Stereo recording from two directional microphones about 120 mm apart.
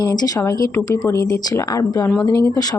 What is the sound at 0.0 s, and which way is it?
A woman's voice, 30° left (ahead or behind).